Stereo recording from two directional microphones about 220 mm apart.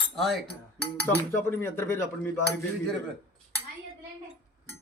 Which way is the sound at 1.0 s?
10° left (ahead or behind).